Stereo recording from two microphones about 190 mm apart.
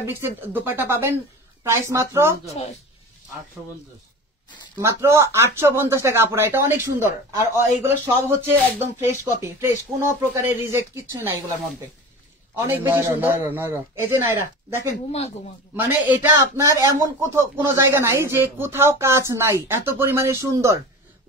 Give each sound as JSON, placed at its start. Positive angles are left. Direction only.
{"t": 0.0, "sound": "a man's voice", "side_deg": -10}
{"t": 4.7, "sound": "a man's voice", "side_deg": -15}
{"t": 12.5, "sound": "a man's voice", "side_deg": -10}
{"t": 15.0, "sound": "speech", "side_deg": 35}
{"t": 15.7, "sound": "a man's voice", "side_deg": -10}